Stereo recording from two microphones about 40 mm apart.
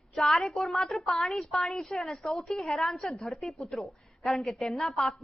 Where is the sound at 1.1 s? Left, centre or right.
Centre.